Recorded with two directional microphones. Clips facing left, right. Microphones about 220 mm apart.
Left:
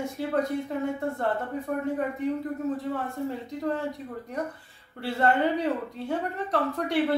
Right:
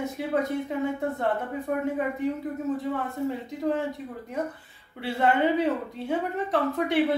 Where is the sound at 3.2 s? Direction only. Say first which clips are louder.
Right 4 dB; centre (ahead or behind).